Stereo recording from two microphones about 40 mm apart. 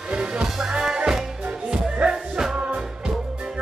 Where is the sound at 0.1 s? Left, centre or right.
Centre.